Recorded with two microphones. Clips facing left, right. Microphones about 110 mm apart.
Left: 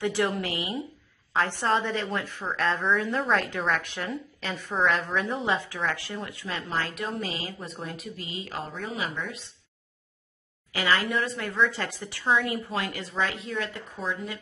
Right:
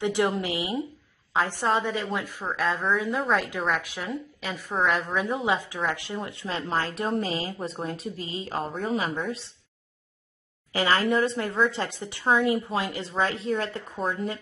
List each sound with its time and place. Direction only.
0.0 s a woman's voice: 20° right (ahead or behind)
7.0 s a woman's voice: 40° right (ahead or behind)
10.7 s a woman's voice: 40° right (ahead or behind)